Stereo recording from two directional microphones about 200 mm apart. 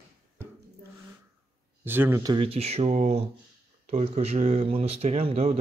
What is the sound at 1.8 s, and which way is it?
Speech, 10° right (ahead or behind).